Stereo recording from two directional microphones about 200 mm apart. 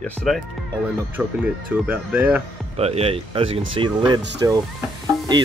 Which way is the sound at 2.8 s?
30° right (ahead or behind).